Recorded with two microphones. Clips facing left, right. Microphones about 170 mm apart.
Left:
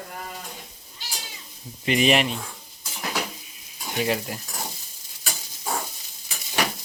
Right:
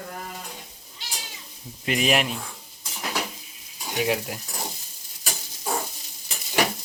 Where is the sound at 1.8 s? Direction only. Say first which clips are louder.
Left 3 dB; centre (ahead or behind).